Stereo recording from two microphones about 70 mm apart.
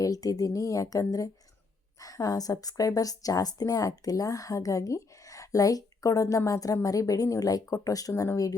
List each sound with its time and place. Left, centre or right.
0.0 s a woman's voice: left